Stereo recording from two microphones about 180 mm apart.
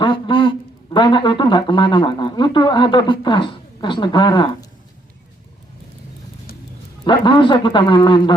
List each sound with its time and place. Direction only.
0.0 s speech: 25° left (ahead or behind)
7.0 s a man's voice: 25° left (ahead or behind)